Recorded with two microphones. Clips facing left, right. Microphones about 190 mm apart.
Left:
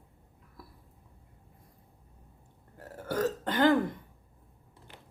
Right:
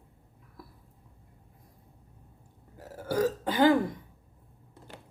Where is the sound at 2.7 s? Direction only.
5° right (ahead or behind).